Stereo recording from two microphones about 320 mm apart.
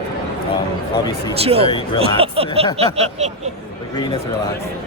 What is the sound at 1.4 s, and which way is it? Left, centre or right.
Speech, centre.